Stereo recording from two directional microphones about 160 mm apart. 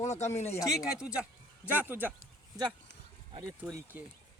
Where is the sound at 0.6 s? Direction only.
5° right (ahead or behind).